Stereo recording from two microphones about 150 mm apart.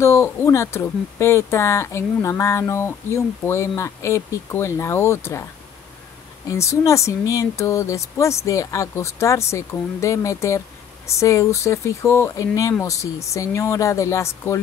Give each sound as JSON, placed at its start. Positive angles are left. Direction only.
{"t": 0.0, "sound": "speech", "side_deg": 20}
{"t": 6.5, "sound": "speech", "side_deg": 20}